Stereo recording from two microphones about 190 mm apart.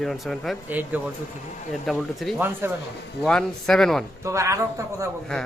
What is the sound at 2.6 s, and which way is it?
Speech, 10° right (ahead or behind).